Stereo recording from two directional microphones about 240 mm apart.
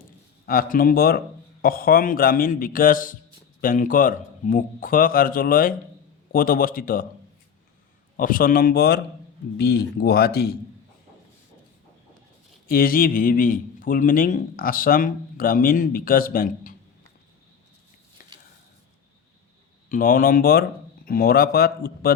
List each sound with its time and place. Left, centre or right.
0.4 s a man's voice: left
8.1 s a man's voice: left
12.6 s a man's voice: left
18.2 s a sound: left
19.9 s a man's voice: left